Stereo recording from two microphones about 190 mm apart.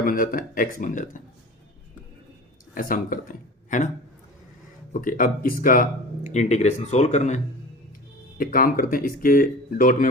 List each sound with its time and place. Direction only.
0.0 s speech: 45° left (ahead or behind)
2.7 s speech: 45° left (ahead or behind)
4.9 s speech: 45° left (ahead or behind)